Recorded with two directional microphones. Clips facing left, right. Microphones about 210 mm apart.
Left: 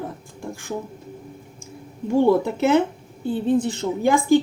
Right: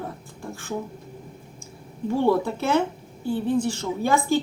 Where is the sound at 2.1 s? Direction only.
20° left (ahead or behind).